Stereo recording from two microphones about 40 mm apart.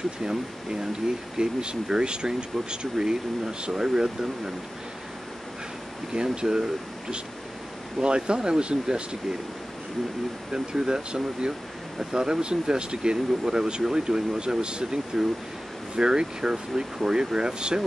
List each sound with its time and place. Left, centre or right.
0.2 s speech: centre
6.1 s speech: centre
10.5 s speech: centre